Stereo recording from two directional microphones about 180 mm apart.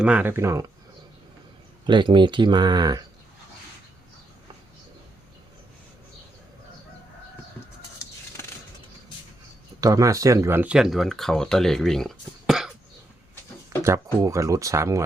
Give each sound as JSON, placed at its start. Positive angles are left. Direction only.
{"t": 0.0, "sound": "speech", "side_deg": -5}
{"t": 1.9, "sound": "speech", "side_deg": -25}
{"t": 9.8, "sound": "speech", "side_deg": -20}
{"t": 13.8, "sound": "speech", "side_deg": -15}